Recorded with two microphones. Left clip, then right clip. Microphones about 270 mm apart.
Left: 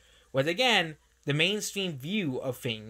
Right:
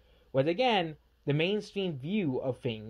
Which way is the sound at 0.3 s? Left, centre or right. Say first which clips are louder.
Left 2 dB; centre.